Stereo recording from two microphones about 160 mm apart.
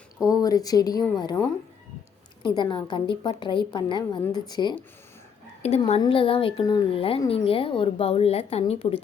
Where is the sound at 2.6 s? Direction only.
30° left (ahead or behind).